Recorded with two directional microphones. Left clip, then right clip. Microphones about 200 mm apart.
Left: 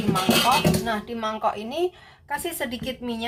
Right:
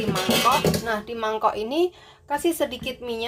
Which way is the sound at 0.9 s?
45° right (ahead or behind).